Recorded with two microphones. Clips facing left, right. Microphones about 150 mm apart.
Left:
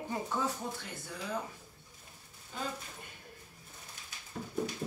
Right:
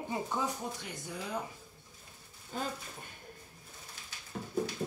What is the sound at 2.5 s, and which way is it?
Speech, 40° right (ahead or behind).